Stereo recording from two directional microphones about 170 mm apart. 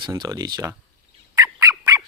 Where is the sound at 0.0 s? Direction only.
25° right (ahead or behind).